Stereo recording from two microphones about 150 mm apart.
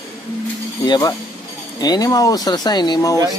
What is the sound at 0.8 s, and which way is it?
Speech, 30° left (ahead or behind).